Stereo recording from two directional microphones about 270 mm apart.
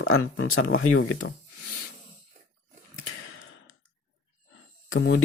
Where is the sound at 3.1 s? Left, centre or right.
Left.